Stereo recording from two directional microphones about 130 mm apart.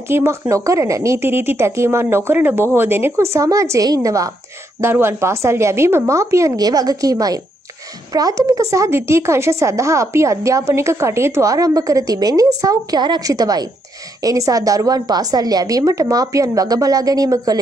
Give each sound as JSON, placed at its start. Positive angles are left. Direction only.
{"t": 0.1, "sound": "a woman's voice", "side_deg": -20}